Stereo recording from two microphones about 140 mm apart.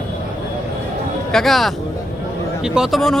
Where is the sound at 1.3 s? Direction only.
Centre (ahead or behind).